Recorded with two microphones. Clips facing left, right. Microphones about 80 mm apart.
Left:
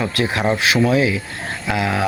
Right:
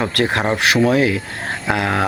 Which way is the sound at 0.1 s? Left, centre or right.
Right.